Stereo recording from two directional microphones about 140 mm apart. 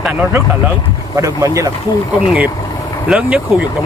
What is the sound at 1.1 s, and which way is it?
Speech, 25° right (ahead or behind).